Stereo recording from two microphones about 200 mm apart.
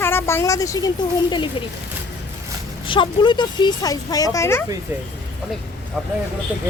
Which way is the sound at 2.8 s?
25° left (ahead or behind).